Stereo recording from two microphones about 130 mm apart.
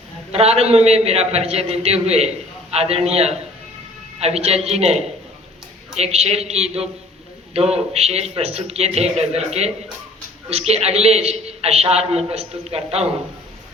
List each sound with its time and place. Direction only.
0.3 s a man's voice: 50° right (ahead or behind)